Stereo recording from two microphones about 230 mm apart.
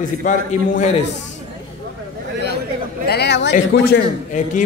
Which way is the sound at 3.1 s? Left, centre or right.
Left.